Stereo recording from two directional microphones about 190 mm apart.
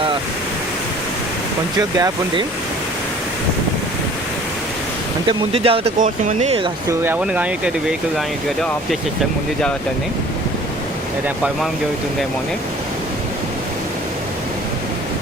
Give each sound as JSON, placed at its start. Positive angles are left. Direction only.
{"t": 2.0, "sound": "speech", "side_deg": -20}
{"t": 5.5, "sound": "speech", "side_deg": -30}
{"t": 7.0, "sound": "speech", "side_deg": -10}